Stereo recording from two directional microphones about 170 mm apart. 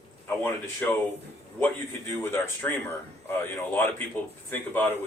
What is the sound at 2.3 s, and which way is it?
Speech, 10° left (ahead or behind).